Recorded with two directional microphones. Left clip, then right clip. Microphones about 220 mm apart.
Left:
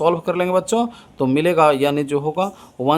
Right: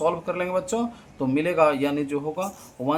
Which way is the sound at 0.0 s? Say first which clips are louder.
Left 6 dB; 50° left (ahead or behind).